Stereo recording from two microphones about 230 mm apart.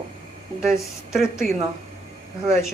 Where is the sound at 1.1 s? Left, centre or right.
Centre.